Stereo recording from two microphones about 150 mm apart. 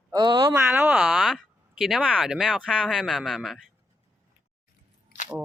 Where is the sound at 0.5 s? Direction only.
5° right (ahead or behind).